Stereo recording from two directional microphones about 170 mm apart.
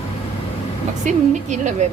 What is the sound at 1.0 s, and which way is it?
Speech, 45° right (ahead or behind).